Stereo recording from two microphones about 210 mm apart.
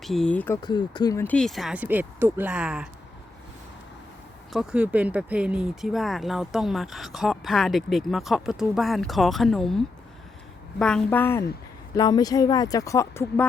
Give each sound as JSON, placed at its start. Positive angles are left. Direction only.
{"t": 0.0, "sound": "speech", "side_deg": 0}
{"t": 0.6, "sound": "speech", "side_deg": 20}
{"t": 4.5, "sound": "speech", "side_deg": -5}